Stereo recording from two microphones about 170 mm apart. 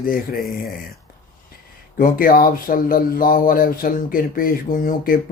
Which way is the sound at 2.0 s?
55° left (ahead or behind).